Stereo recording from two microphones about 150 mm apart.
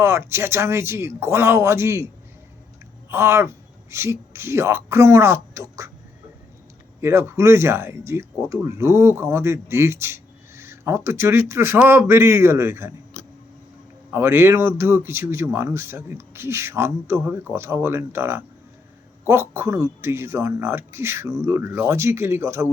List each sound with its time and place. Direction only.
0.0 s speech: 15° right (ahead or behind)
3.1 s speech: 15° right (ahead or behind)
7.0 s speech: 15° right (ahead or behind)
13.2 s a sound: 45° left (ahead or behind)
14.1 s speech: 15° right (ahead or behind)